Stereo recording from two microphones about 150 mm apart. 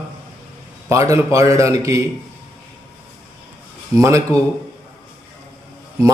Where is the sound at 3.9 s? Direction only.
20° right (ahead or behind).